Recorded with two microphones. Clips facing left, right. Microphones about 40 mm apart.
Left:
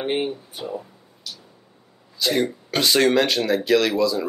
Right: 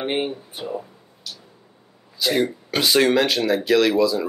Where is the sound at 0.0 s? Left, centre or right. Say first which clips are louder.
Even; centre.